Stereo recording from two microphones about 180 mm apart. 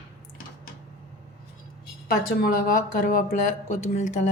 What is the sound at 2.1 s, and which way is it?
Speech, 50° left (ahead or behind).